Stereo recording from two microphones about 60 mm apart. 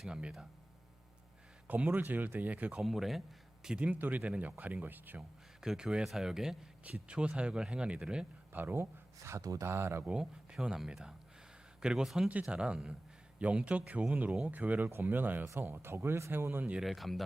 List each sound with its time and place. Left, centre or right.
0.2 s speech: centre
1.6 s speech: right
2.8 s speech: centre
3.9 s speech: right
5.5 s speech: centre
8.5 s speech: right
9.4 s speech: right
9.6 s speech: right
10.2 s speech: centre
12.3 s speech: right
16.8 s speech: centre